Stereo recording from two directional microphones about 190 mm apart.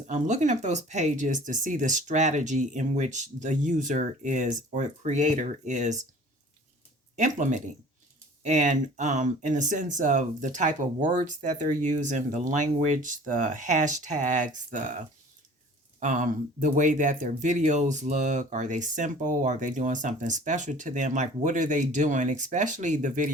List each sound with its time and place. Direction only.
0.1 s speech: 40° right (ahead or behind)
7.2 s speech: 40° right (ahead or behind)